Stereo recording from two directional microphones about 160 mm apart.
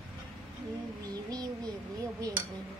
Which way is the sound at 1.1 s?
25° right (ahead or behind).